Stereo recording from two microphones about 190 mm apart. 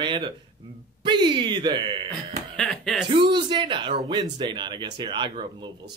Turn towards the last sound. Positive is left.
turn(degrees=-25)  # may be behind; listen again after turning